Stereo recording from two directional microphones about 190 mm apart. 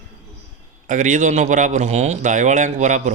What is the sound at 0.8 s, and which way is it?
A man's voice, 40° right (ahead or behind).